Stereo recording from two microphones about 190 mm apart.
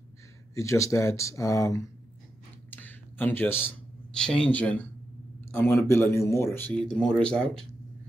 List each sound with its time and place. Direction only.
0.6 s speech: 15° left (ahead or behind)
2.7 s a sound: 10° left (ahead or behind)
5.5 s speech: 10° left (ahead or behind)